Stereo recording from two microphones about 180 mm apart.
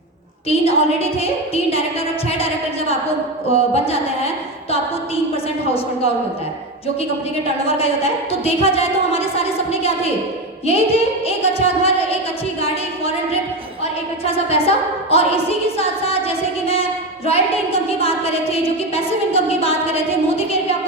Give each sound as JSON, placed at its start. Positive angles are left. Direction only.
{"t": 0.4, "sound": "a woman's voice", "side_deg": 35}
{"t": 3.5, "sound": "a woman's voice", "side_deg": 35}
{"t": 7.8, "sound": "a woman's voice", "side_deg": 35}
{"t": 10.7, "sound": "a woman's voice", "side_deg": 35}
{"t": 14.3, "sound": "a woman's voice", "side_deg": 35}
{"t": 17.2, "sound": "a woman's voice", "side_deg": 35}